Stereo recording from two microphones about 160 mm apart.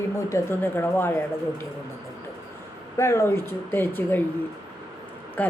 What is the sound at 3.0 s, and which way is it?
A woman's voice, 15° left (ahead or behind).